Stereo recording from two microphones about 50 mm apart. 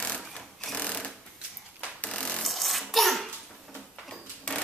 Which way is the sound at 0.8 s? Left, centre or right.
Left.